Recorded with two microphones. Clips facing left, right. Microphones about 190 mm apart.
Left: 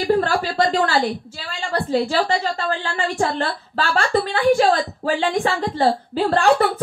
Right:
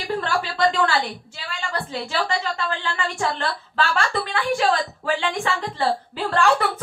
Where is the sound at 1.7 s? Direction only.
40° left (ahead or behind).